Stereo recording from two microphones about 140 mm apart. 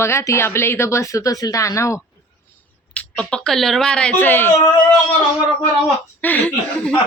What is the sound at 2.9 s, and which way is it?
Speech, 5° left (ahead or behind).